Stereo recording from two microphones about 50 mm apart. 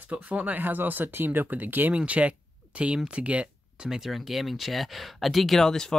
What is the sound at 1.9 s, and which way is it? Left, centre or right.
Speech, right.